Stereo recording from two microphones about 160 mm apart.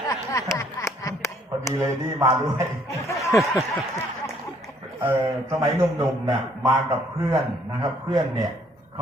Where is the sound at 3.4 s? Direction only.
Centre (ahead or behind).